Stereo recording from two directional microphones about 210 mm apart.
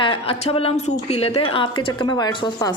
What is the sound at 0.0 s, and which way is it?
A woman's voice, 25° left (ahead or behind).